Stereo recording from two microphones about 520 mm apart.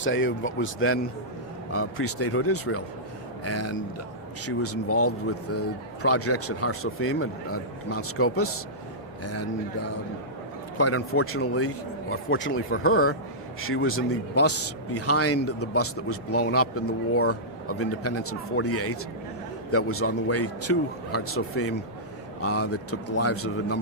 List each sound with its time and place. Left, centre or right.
0.0 s a man's voice: left
10.8 s a man's voice: left